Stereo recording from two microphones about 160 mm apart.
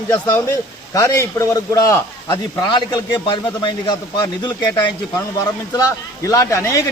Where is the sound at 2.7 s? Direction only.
30° left (ahead or behind).